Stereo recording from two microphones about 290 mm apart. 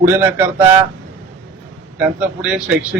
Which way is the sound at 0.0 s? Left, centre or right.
Centre.